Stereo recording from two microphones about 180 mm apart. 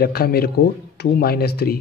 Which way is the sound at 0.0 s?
60° left (ahead or behind).